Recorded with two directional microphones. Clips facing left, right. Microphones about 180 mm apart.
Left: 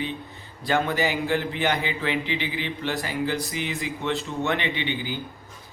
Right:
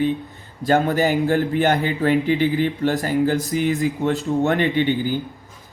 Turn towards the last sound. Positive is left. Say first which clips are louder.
# right 9 dB
turn(degrees=-45)  # may be behind; listen again after turning